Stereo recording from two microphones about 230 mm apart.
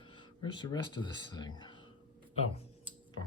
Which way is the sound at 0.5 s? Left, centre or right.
Centre.